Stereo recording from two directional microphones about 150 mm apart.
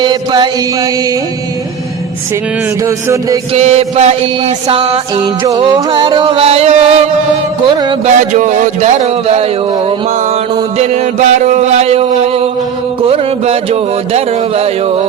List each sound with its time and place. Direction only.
0.0 s chant: 30° right (ahead or behind)
2.8 s chant: 20° right (ahead or behind)
3.5 s music: 50° right (ahead or behind)
7.7 s music: 30° right (ahead or behind)
8.0 s music: 55° right (ahead or behind)
10.8 s music: 45° right (ahead or behind)